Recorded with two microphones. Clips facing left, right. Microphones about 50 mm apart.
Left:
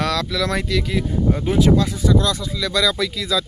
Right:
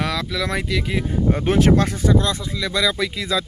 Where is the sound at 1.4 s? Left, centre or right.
Right.